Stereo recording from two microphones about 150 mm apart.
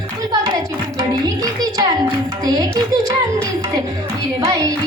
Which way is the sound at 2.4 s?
25° right (ahead or behind).